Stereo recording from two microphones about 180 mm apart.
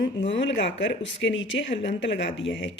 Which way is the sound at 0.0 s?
75° left (ahead or behind).